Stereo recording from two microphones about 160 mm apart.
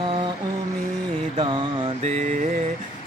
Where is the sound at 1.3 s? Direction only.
30° right (ahead or behind).